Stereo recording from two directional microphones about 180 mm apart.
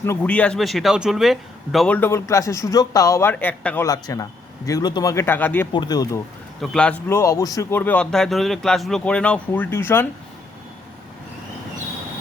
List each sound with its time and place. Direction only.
0.0 s a man's voice: 10° left (ahead or behind)
5.7 s a man's voice: 25° left (ahead or behind)
6.6 s a man's voice: 5° left (ahead or behind)